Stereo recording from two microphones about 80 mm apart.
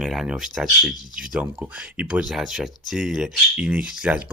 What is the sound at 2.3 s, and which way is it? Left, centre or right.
Speech, centre.